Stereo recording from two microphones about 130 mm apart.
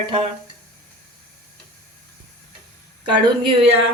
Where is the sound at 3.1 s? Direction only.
40° right (ahead or behind).